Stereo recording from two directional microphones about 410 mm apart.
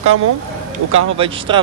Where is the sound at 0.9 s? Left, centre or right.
Centre.